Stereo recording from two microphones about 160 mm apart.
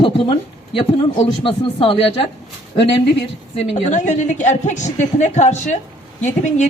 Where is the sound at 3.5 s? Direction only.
45° left (ahead or behind).